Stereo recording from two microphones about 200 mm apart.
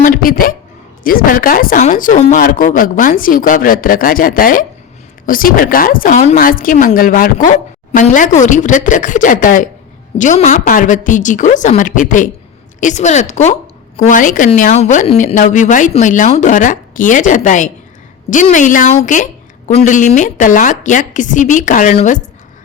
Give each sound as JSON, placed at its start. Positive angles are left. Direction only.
{"t": 0.0, "sound": "a woman's voice", "side_deg": 45}